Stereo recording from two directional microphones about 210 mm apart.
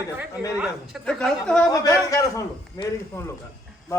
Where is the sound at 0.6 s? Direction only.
Centre (ahead or behind).